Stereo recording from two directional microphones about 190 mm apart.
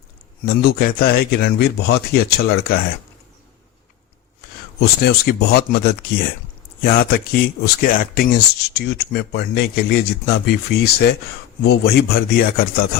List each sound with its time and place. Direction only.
0.4 s a man's voice: 50° left (ahead or behind)
4.8 s a man's voice: 55° left (ahead or behind)